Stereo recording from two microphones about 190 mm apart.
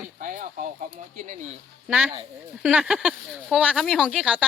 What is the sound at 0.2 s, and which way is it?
Speech, 45° right (ahead or behind).